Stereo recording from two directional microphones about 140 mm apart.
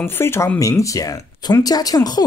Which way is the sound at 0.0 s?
15° left (ahead or behind).